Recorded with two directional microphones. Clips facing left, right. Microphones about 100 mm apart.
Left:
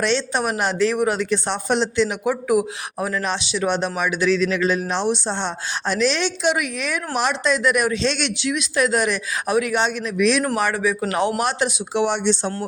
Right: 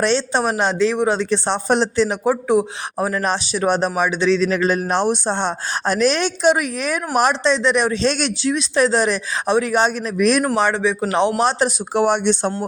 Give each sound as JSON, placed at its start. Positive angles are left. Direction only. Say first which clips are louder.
{"t": 0.0, "sound": "speech", "louder": "right 3 dB", "side_deg": -35}
{"t": 7.4, "sound": "speech", "louder": "right 2 dB", "side_deg": -25}
{"t": 8.0, "sound": "speech", "louder": "right 3 dB", "side_deg": -40}
{"t": 10.4, "sound": "speech", "louder": "right 3 dB", "side_deg": -25}
{"t": 11.9, "sound": "speech", "louder": "right 3 dB", "side_deg": -50}